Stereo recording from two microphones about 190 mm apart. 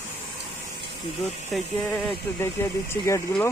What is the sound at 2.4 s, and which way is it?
Speech, 10° left (ahead or behind).